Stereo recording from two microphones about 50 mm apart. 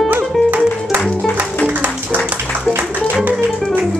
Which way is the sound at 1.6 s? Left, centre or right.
Right.